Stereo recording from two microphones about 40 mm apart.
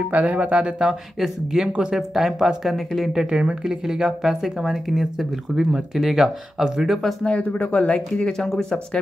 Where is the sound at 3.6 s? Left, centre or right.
Centre.